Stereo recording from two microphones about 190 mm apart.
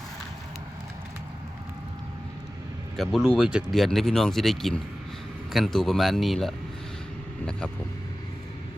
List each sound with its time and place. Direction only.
2.9 s speech: centre (ahead or behind)